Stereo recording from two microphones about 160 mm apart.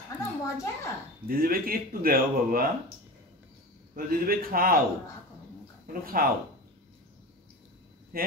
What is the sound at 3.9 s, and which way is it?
Speech, 65° right (ahead or behind).